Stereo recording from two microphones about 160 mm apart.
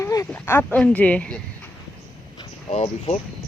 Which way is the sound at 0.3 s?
10° left (ahead or behind).